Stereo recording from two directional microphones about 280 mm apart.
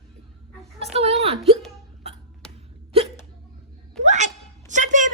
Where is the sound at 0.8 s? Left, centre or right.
Right.